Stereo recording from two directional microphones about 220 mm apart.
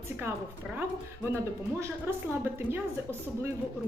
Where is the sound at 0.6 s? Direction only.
5° right (ahead or behind).